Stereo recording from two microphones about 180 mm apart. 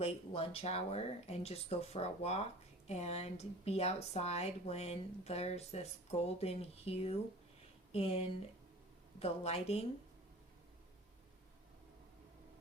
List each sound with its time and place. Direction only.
0.0 s speech: 35° left (ahead or behind)